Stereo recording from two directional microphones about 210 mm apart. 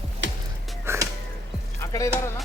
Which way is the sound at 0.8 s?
15° right (ahead or behind).